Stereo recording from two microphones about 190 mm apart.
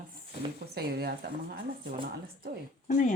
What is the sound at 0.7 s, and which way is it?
Speech, 55° right (ahead or behind).